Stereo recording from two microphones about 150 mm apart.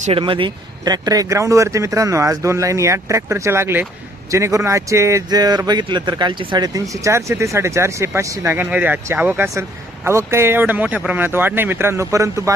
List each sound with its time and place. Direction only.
0.0 s speech: 40° right (ahead or behind); by 12.5 s 20° right (ahead or behind)